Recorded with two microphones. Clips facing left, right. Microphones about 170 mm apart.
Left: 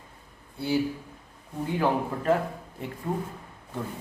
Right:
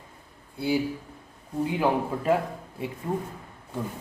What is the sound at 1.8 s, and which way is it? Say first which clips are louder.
Speech: even; 15° right (ahead or behind).